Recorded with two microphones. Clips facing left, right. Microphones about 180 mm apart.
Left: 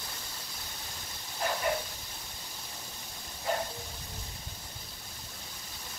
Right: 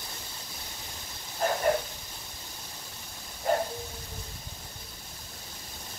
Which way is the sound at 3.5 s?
45° right (ahead or behind).